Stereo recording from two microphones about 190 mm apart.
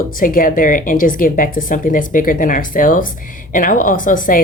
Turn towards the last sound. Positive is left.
turn(degrees=45)  # may be behind; listen again after turning